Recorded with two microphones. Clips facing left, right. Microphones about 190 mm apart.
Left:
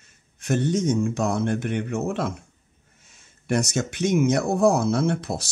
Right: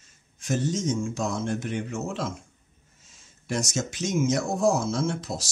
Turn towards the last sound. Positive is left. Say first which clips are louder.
# left 4 dB
turn(degrees=60)  # may be behind; listen again after turning